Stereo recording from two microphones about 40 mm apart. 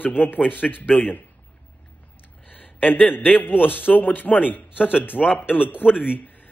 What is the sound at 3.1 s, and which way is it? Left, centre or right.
A man's voice, left.